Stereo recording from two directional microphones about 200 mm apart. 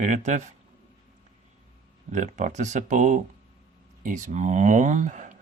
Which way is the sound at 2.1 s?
35° right (ahead or behind).